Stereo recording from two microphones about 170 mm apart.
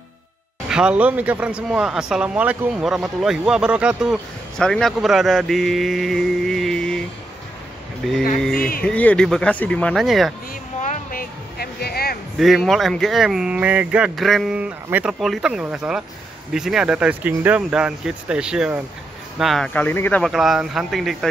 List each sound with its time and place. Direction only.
0.7 s speech: 5° right (ahead or behind)
8.0 s speech: 5° left (ahead or behind)
8.5 s speech: 60° left (ahead or behind)
8.8 s speech: 5° left (ahead or behind)
10.8 s music: 50° left (ahead or behind)
12.4 s speech: centre (ahead or behind)